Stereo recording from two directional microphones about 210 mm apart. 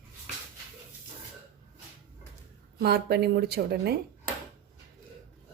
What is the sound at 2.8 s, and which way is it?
A woman's voice, 50° right (ahead or behind).